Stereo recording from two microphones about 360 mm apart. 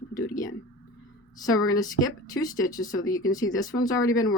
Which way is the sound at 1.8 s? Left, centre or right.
Centre.